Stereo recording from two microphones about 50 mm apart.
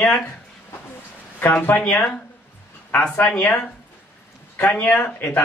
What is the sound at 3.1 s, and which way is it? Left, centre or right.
Speech, left.